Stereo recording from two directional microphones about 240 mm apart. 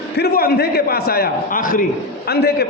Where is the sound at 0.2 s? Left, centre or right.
Left.